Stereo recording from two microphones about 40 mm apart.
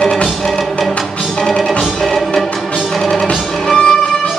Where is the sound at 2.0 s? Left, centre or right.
Centre.